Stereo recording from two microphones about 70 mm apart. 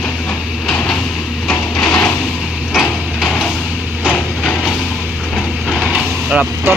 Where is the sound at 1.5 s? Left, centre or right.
Centre.